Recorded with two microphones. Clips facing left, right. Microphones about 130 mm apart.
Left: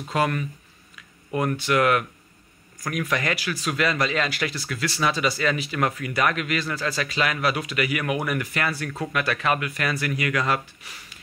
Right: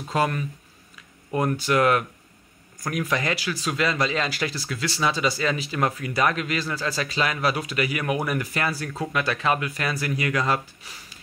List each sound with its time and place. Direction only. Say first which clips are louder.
0.1 s speech: even; 30° right (ahead or behind)